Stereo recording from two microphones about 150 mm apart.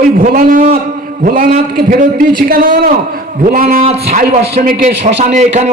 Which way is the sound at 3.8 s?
40° right (ahead or behind).